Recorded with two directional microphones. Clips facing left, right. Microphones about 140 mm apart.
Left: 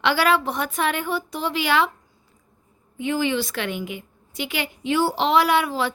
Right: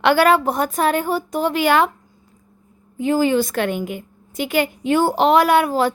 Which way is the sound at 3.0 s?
40° right (ahead or behind).